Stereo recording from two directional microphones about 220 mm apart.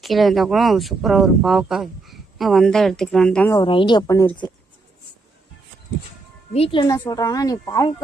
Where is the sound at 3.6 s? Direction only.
20° left (ahead or behind).